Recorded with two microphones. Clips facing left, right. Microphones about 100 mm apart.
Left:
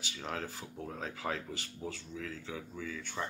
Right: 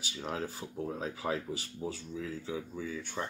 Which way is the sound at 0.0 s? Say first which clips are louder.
Right 3 dB; 15° right (ahead or behind).